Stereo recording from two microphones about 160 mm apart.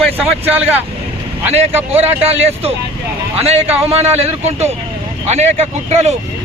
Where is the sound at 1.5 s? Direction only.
40° right (ahead or behind).